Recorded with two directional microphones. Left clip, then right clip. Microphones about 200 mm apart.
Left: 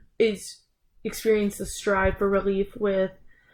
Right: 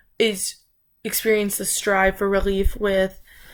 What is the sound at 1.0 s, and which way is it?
A woman's voice, 10° right (ahead or behind).